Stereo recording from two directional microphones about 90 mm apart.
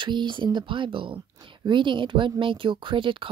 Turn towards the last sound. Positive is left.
turn(degrees=-75)  # may be behind; listen again after turning